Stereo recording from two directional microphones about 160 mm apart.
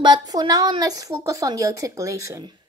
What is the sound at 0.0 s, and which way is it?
A woman's voice, 25° right (ahead or behind).